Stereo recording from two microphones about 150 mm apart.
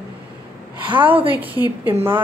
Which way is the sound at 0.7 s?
35° right (ahead or behind).